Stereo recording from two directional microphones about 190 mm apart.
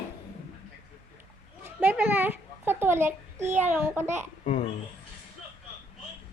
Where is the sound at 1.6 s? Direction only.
10° right (ahead or behind).